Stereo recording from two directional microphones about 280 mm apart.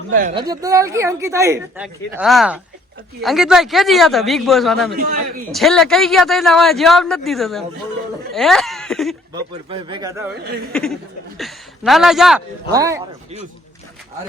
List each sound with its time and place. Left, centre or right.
0.1 s speech: right
0.3 s a woman's voice: centre
4.9 s a man's voice: right
5.5 s speech: centre
9.3 s a woman's voice: centre
10.4 s a man's voice: right
10.7 s speech: centre
12.7 s a woman's voice: centre